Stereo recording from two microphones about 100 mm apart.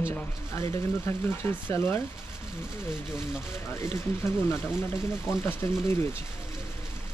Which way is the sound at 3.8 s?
30° left (ahead or behind).